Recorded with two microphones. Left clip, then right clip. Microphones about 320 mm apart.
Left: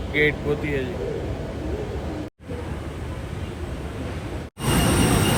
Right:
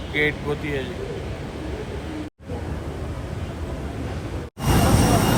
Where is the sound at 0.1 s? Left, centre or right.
Centre.